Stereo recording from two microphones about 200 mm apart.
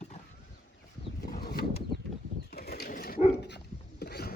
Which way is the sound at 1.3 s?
50° left (ahead or behind).